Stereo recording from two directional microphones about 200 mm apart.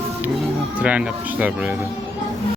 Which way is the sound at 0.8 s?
5° right (ahead or behind).